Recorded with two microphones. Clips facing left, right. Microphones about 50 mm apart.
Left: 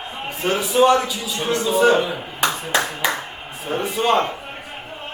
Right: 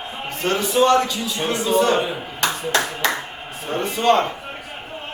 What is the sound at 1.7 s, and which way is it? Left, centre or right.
Speech, centre.